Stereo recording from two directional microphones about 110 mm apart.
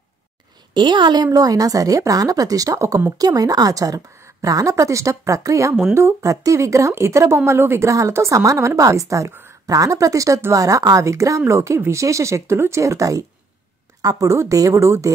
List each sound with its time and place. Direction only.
0.7 s a woman's voice: 45° right (ahead or behind); by 13.2 s 30° right (ahead or behind)
14.2 s a woman's voice: 30° right (ahead or behind)